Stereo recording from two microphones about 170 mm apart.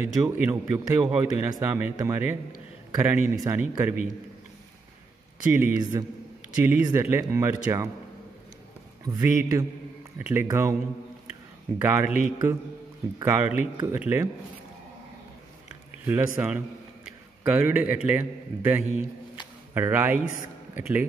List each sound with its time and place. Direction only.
0.0 s speech: 10° right (ahead or behind)
5.5 s a man's voice: 20° right (ahead or behind)
9.0 s a man's voice: 20° right (ahead or behind)
11.8 s speech: 10° right (ahead or behind)
16.1 s a man's voice: 10° right (ahead or behind)